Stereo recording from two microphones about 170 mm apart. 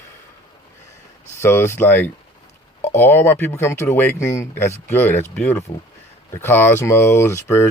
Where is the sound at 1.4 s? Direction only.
15° left (ahead or behind).